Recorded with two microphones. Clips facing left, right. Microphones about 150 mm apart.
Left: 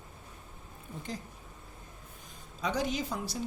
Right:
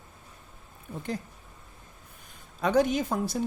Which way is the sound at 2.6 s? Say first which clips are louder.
Right 8 dB; 55° right (ahead or behind).